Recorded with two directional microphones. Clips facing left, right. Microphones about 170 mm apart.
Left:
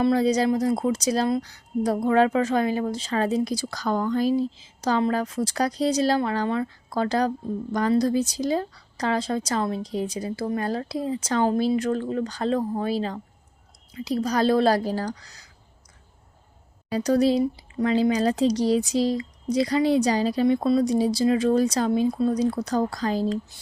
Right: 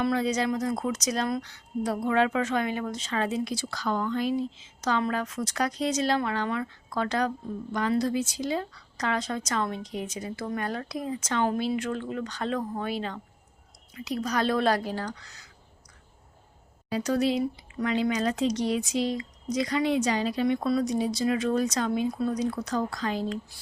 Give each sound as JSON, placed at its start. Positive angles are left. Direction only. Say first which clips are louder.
{"t": 0.0, "sound": "a woman's voice", "louder": "left 6 dB", "side_deg": 35}
{"t": 16.9, "sound": "a woman's voice", "louder": "left 5 dB", "side_deg": 35}